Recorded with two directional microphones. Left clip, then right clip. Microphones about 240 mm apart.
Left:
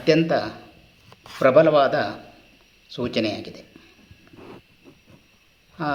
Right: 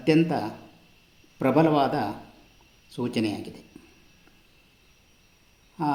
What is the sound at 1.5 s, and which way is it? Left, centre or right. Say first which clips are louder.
Speech: left 6 dB; left.